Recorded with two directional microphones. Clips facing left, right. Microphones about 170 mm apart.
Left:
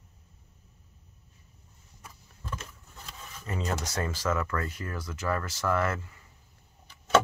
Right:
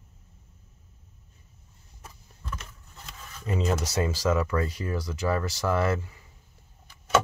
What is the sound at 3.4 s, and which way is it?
Speech, 20° right (ahead or behind).